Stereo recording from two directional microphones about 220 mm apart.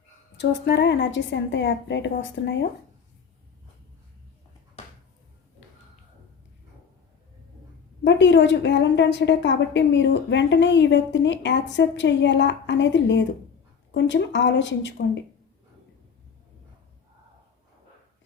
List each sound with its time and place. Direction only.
0.3 s a woman's voice: 50° left (ahead or behind)
8.0 s a woman's voice: 55° left (ahead or behind)